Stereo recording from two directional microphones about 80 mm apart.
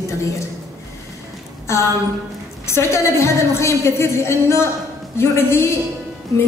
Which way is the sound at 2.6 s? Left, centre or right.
Left.